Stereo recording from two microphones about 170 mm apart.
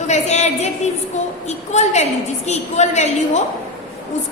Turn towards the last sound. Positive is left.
turn(degrees=40)  # may be behind; listen again after turning